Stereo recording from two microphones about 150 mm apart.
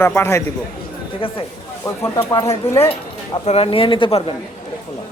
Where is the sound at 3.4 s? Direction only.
40° left (ahead or behind).